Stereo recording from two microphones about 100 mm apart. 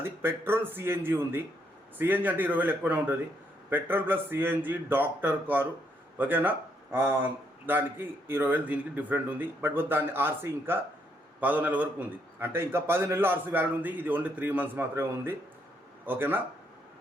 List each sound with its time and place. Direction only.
0.0 s a man's voice: 20° right (ahead or behind)